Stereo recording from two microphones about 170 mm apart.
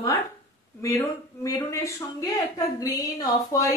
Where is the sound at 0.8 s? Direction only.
20° left (ahead or behind).